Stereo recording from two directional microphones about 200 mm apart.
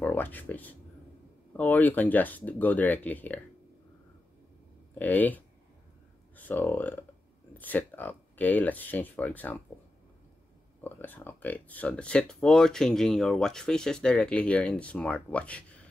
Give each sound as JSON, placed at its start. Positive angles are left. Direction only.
{"t": 0.0, "sound": "speech", "side_deg": 10}
{"t": 4.9, "sound": "speech", "side_deg": 10}
{"t": 10.8, "sound": "speech", "side_deg": 10}